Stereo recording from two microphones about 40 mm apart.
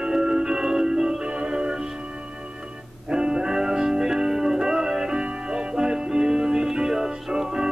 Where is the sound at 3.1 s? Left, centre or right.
Right.